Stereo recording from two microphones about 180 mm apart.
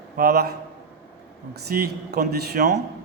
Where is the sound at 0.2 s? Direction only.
60° right (ahead or behind).